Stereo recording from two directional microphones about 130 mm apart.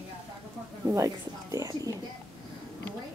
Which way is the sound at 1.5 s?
25° right (ahead or behind).